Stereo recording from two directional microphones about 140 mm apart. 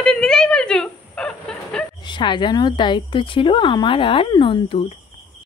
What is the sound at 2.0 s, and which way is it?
A woman's voice, 35° left (ahead or behind).